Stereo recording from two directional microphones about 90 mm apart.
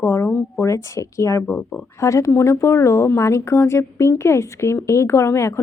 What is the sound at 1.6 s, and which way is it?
Speech, 10° left (ahead or behind).